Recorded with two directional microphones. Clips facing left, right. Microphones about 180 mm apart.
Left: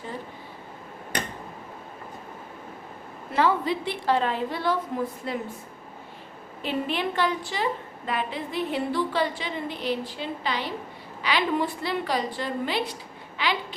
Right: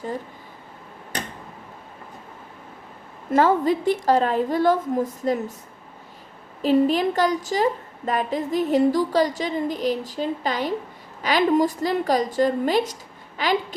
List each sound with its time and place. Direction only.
3.3 s a woman's voice: 45° right (ahead or behind)
6.6 s a woman's voice: 40° right (ahead or behind)